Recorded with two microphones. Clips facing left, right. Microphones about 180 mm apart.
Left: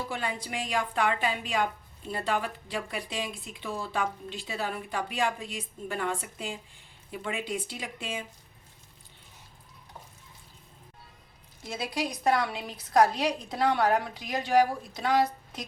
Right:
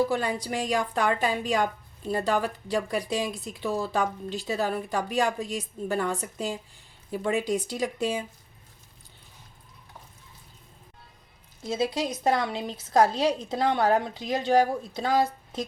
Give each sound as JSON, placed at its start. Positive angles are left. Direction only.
{"t": 0.1, "sound": "speech", "side_deg": -40}
{"t": 11.7, "sound": "a woman's voice", "side_deg": -25}